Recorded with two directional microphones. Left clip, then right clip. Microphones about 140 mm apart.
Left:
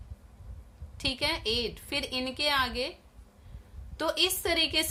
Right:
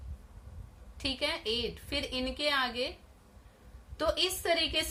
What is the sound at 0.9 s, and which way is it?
A woman's voice, 40° left (ahead or behind).